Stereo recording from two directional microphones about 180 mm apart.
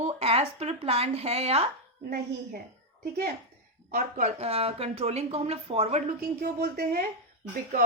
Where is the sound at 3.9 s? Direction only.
45° right (ahead or behind).